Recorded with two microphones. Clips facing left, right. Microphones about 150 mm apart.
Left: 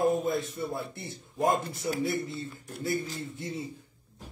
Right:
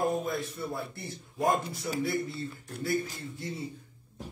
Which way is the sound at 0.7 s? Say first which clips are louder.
Left 1 dB; 25° left (ahead or behind).